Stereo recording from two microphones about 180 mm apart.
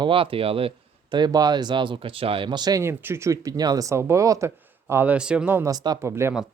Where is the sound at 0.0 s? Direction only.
30° right (ahead or behind); by 6.3 s 15° right (ahead or behind).